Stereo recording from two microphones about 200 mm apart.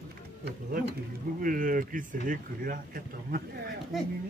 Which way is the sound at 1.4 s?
45° right (ahead or behind).